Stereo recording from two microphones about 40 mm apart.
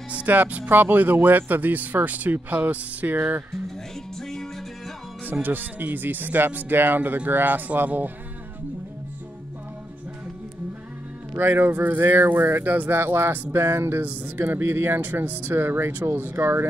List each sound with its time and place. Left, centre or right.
0.3 s speech: right
0.7 s speech: right
4.2 s music: centre
5.2 s speech: right
11.3 s speech: right
12.9 s speech: right
13.5 s speech: right
15.0 s speech: right
16.3 s speech: right